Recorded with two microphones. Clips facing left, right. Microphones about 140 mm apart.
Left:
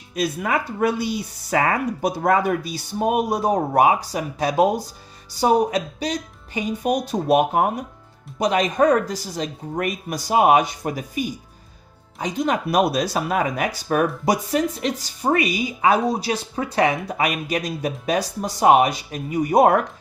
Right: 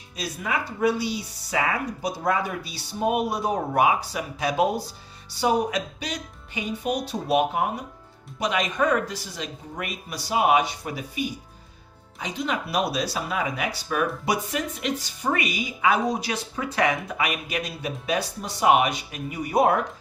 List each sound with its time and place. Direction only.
0.2 s speech: 50° left (ahead or behind)